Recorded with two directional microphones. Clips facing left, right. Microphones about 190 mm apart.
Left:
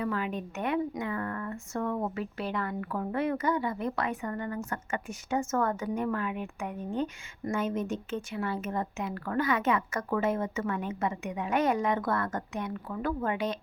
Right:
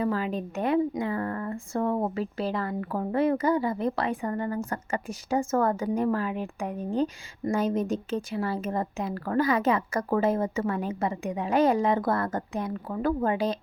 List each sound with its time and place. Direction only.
0.0 s speech: 35° right (ahead or behind)